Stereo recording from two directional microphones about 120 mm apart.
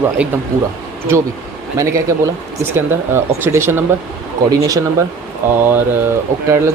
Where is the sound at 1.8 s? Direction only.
25° right (ahead or behind).